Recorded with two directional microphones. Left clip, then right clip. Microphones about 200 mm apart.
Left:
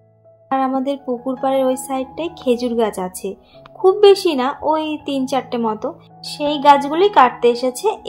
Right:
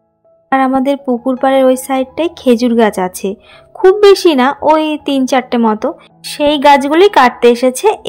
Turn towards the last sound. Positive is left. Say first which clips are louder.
# right 7 dB
turn(degrees=-40)  # may be behind; listen again after turning